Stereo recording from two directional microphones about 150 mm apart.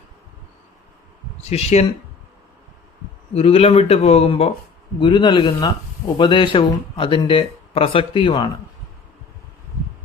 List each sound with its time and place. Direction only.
1.5 s speech: 45° left (ahead or behind)
3.3 s speech: 40° left (ahead or behind)